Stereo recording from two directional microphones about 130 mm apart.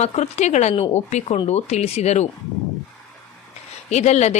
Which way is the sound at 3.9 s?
60° left (ahead or behind).